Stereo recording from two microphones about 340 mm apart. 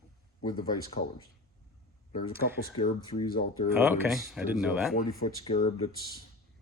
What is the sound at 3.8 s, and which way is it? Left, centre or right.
Speech, centre.